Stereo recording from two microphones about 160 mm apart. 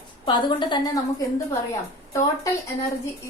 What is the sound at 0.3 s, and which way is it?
Speech, 30° left (ahead or behind).